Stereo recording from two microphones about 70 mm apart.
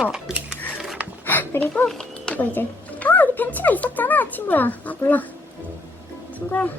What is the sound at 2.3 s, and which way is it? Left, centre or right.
Music, left.